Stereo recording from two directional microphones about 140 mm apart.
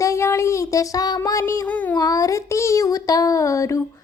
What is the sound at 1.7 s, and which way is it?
Child singing, 10° left (ahead or behind).